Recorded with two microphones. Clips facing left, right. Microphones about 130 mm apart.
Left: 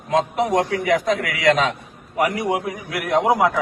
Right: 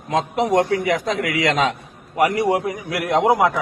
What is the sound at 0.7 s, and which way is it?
A man's voice, 25° right (ahead or behind).